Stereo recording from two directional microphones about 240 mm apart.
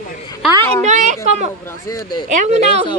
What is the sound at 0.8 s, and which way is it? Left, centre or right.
Speech, right.